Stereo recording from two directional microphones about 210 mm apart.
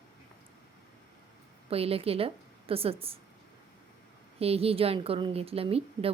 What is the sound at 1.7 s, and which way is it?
A woman's voice, 25° right (ahead or behind).